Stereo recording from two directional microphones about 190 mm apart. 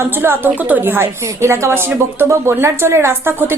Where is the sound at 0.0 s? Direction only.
10° right (ahead or behind).